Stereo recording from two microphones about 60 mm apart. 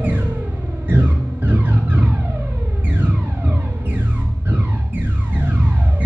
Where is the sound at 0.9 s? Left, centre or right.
Right.